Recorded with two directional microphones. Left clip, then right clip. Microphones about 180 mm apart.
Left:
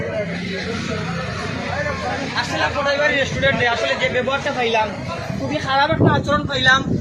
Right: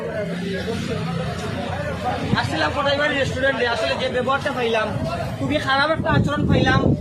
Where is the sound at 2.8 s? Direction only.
25° right (ahead or behind).